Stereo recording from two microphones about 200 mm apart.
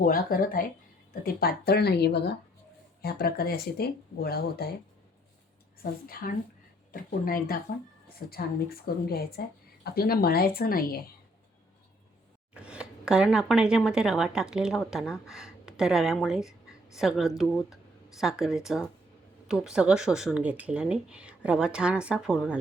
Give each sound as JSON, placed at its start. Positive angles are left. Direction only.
{"t": 0.0, "sound": "speech", "side_deg": 45}
{"t": 5.8, "sound": "speech", "side_deg": 45}
{"t": 12.5, "sound": "speech", "side_deg": -5}